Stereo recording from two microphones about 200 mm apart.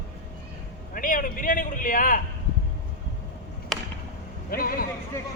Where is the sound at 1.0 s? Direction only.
45° left (ahead or behind).